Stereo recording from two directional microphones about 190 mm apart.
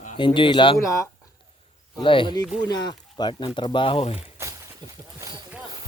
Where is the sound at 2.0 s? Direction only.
25° left (ahead or behind).